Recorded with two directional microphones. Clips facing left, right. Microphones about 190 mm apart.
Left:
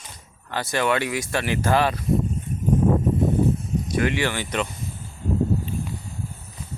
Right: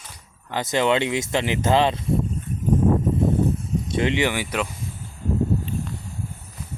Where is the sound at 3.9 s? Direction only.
20° right (ahead or behind).